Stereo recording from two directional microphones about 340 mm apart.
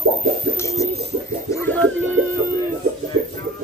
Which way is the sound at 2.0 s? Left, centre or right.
Right.